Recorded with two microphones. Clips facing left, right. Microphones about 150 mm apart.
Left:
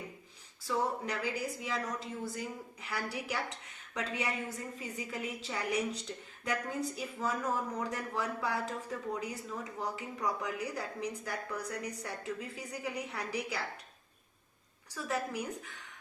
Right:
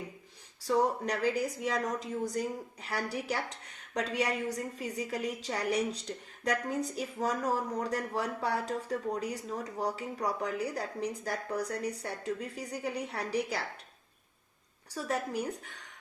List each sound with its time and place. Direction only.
0.7 s speech: 40° right (ahead or behind)
14.9 s speech: 35° right (ahead or behind)